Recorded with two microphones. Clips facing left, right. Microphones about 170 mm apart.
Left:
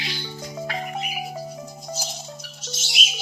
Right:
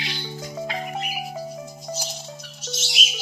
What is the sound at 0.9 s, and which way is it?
Music, centre (ahead or behind).